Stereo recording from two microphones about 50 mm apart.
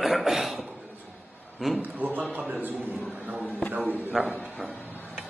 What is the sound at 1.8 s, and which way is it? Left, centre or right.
Speech, right.